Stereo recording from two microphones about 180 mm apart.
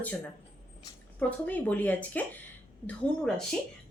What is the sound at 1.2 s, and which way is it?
A woman's voice, 10° left (ahead or behind).